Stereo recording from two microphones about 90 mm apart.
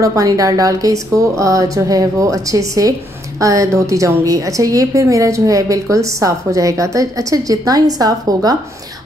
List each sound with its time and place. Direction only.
0.0 s a woman's voice: 40° right (ahead or behind)